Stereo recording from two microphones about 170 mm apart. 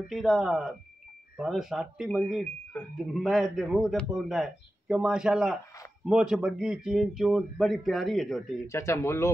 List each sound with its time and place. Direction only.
0.1 s speech: centre (ahead or behind)
8.6 s speech: 15° left (ahead or behind)